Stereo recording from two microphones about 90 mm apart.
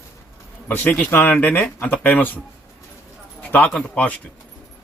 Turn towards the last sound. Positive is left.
turn(degrees=15)  # may be behind; listen again after turning